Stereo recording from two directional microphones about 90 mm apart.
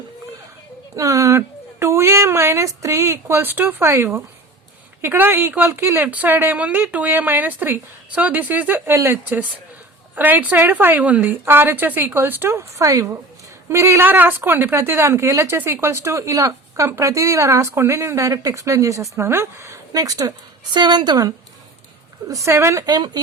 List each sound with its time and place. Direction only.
0.9 s a sound: 35° right (ahead or behind)
1.4 s a woman's voice: 30° right (ahead or behind)
19.9 s speech: 40° right (ahead or behind)
22.3 s speech: 35° right (ahead or behind)
22.8 s speech: 50° right (ahead or behind)